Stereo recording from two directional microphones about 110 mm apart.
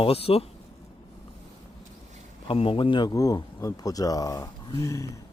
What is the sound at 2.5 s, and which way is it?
Speech, 55° left (ahead or behind).